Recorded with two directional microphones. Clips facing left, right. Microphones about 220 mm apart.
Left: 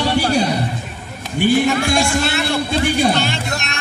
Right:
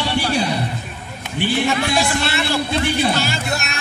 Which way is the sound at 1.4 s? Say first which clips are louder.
Left 6 dB; 45° left (ahead or behind).